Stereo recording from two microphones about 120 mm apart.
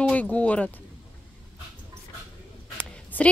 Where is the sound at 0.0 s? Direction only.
10° left (ahead or behind).